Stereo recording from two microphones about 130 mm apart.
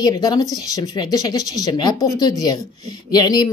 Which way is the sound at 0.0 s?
30° left (ahead or behind).